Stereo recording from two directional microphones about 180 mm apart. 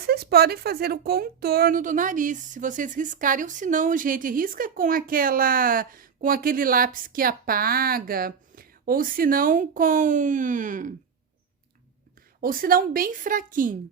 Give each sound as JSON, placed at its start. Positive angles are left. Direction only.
{"t": 0.0, "sound": "speech", "side_deg": -60}
{"t": 12.4, "sound": "speech", "side_deg": -50}